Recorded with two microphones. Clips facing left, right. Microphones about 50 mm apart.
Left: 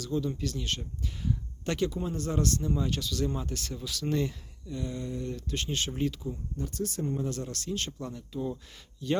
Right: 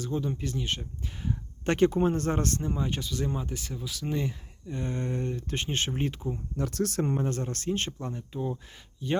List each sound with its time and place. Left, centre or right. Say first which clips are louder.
0.0 s speech: even; right
3.3 s speech: right 1 dB; centre
4.6 s speech: right 3 dB; right
5.2 s speech: right 2 dB; right
6.6 s speech: right 5 dB; right
7.2 s speech: right 3 dB; right